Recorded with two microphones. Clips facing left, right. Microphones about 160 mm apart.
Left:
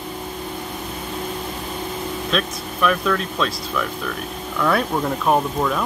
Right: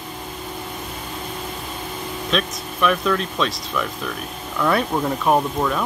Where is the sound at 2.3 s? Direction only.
Centre (ahead or behind).